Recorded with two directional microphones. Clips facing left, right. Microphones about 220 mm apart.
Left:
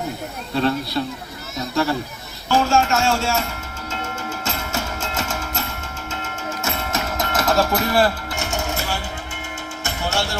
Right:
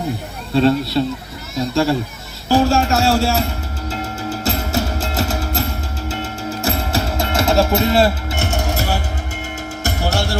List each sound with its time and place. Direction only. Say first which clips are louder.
0.5 s a man's voice: right 6 dB; 30° right (ahead or behind)
3.8 s music: right 4 dB; 35° right (ahead or behind)
8.4 s music: right 4 dB; 35° right (ahead or behind)